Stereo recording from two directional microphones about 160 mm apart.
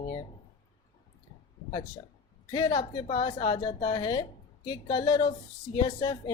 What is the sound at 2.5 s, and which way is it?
A woman's voice, 30° left (ahead or behind).